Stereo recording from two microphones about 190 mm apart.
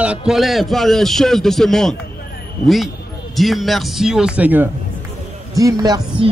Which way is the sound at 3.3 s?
Centre (ahead or behind).